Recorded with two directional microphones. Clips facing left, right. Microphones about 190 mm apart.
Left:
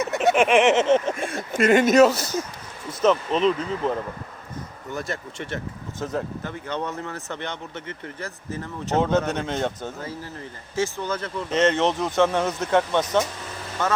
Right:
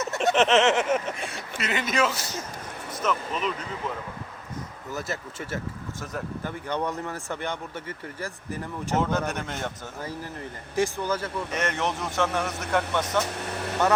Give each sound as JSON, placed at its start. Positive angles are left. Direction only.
{"t": 0.1, "sound": "a sound", "side_deg": 5}
{"t": 1.1, "sound": "speech", "side_deg": 50}
{"t": 3.0, "sound": "speech", "side_deg": 30}
{"t": 4.9, "sound": "speech", "side_deg": -5}
{"t": 6.0, "sound": "speech", "side_deg": 20}
{"t": 6.4, "sound": "speech", "side_deg": -10}
{"t": 9.0, "sound": "speech", "side_deg": 20}
{"t": 10.8, "sound": "speech", "side_deg": -15}
{"t": 11.5, "sound": "speech", "side_deg": 20}
{"t": 13.5, "sound": "vehicle", "side_deg": -65}